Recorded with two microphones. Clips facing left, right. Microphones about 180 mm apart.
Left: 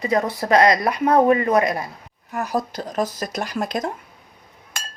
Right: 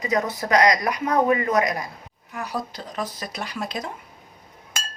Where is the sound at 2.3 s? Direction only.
45° left (ahead or behind).